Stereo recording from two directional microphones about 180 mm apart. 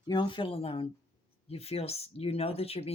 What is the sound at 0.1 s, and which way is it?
Speech, 25° left (ahead or behind).